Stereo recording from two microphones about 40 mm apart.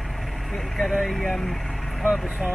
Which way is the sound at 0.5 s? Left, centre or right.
Centre.